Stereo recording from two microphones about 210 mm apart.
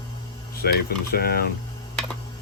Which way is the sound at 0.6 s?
50° left (ahead or behind).